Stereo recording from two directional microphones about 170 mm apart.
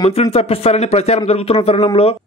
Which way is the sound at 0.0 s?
35° left (ahead or behind).